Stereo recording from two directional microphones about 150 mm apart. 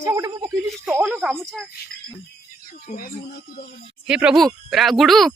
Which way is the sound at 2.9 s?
65° left (ahead or behind).